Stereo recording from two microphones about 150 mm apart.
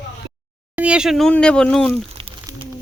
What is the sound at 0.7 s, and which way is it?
Speech, 10° right (ahead or behind).